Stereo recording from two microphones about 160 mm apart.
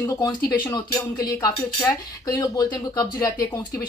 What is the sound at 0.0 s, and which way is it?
Speech, 20° left (ahead or behind).